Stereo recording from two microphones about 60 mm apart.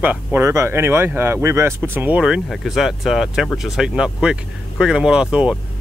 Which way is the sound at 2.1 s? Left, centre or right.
Centre.